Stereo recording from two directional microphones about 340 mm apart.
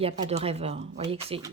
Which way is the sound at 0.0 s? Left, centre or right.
Centre.